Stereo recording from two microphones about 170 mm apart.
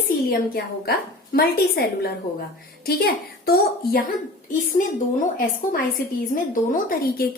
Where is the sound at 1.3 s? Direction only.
65° left (ahead or behind).